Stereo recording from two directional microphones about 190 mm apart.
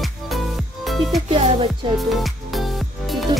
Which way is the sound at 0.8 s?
Centre (ahead or behind).